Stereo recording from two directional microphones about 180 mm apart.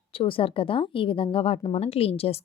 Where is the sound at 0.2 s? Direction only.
30° left (ahead or behind).